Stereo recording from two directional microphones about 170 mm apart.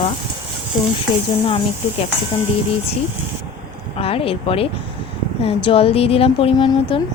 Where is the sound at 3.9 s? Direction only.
35° left (ahead or behind).